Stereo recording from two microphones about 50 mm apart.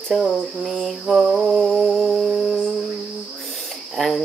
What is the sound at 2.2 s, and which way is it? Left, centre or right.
Music, centre.